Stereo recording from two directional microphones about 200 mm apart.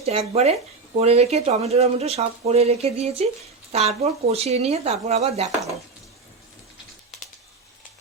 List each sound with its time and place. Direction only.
0.0 s speech: 30° right (ahead or behind)